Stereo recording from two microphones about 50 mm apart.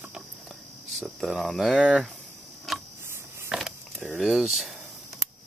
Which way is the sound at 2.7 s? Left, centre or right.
Centre.